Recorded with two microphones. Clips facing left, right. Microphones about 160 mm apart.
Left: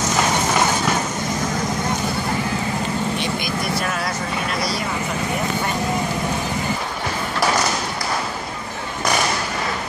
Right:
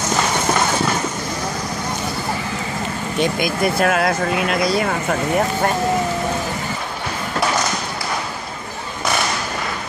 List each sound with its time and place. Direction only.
3.2 s speech: 55° right (ahead or behind)